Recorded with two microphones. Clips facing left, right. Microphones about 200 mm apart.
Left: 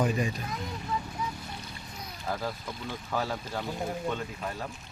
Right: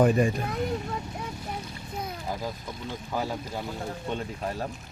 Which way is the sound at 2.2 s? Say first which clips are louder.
Even; 15° right (ahead or behind).